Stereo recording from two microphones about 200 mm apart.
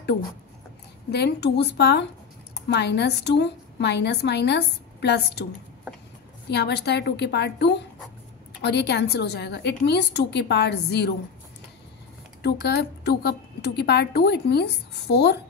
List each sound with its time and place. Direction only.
1.1 s a woman's voice: 55° left (ahead or behind)
6.5 s a woman's voice: 55° left (ahead or behind)
12.4 s a woman's voice: 55° left (ahead or behind)